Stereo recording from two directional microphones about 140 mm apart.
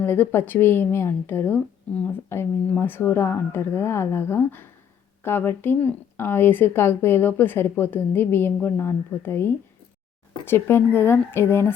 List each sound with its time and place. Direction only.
0.0 s a woman's voice: 15° left (ahead or behind)